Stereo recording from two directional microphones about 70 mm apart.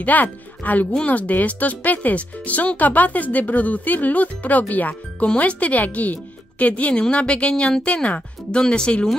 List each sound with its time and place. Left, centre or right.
0.0 s a woman's voice: left